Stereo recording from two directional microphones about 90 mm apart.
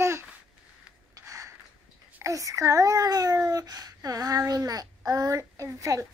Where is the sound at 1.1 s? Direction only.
35° right (ahead or behind).